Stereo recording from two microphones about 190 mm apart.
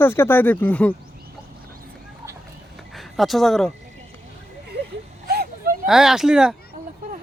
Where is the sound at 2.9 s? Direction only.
Centre (ahead or behind).